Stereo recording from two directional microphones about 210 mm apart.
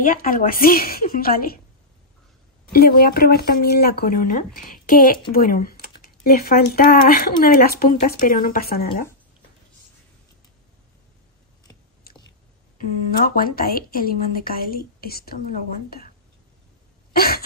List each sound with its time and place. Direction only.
0.0 s a woman's voice: 40° left (ahead or behind)
2.7 s a woman's voice: 45° left (ahead or behind)
12.7 s a woman's voice: 45° left (ahead or behind)
17.1 s throat clearing: 45° left (ahead or behind)